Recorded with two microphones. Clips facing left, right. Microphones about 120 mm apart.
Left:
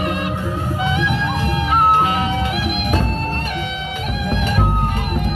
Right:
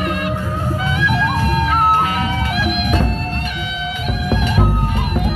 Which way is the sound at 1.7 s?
25° left (ahead or behind).